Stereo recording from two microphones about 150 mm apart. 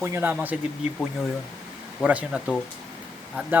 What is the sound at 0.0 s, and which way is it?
Speech, 15° right (ahead or behind).